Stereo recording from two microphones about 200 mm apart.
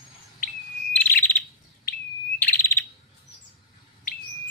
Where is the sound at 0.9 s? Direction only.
10° left (ahead or behind).